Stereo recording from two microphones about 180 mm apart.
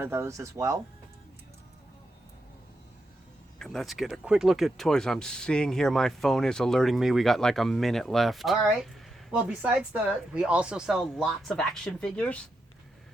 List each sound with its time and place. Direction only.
0.0 s speech: 15° right (ahead or behind)
3.6 s speech: centre (ahead or behind)